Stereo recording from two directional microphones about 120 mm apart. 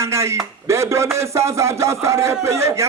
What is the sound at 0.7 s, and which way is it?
A man's voice, 25° right (ahead or behind).